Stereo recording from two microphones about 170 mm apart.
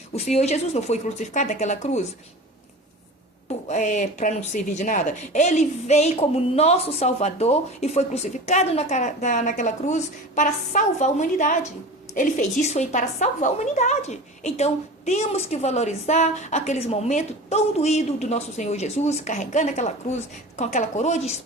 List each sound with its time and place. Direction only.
0.1 s a woman's voice: 40° left (ahead or behind)
3.7 s a woman's voice: 45° left (ahead or behind)